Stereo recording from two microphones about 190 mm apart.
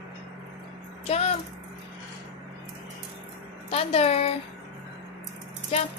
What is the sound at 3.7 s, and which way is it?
Speech, 30° left (ahead or behind).